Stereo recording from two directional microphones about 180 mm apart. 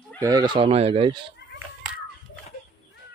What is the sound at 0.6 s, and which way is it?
Speech, 35° right (ahead or behind).